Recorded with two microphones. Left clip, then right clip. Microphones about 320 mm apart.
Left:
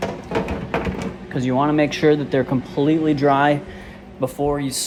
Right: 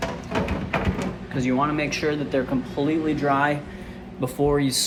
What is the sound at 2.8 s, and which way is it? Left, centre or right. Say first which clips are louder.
Speech: left 6 dB; left.